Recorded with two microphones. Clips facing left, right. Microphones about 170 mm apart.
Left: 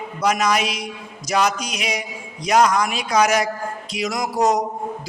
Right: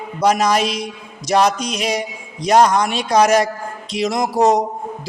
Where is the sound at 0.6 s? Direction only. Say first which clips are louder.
Right 5 dB; 10° left (ahead or behind).